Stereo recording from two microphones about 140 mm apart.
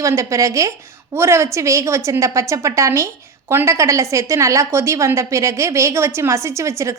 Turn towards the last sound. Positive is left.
turn(degrees=-20)  # may be behind; listen again after turning